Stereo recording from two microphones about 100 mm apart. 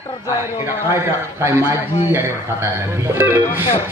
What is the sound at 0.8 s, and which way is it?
A man's voice, 25° right (ahead or behind).